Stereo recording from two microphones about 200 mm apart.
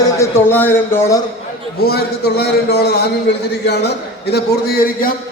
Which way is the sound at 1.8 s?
50° left (ahead or behind).